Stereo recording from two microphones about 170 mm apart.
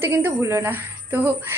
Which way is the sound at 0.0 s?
15° right (ahead or behind).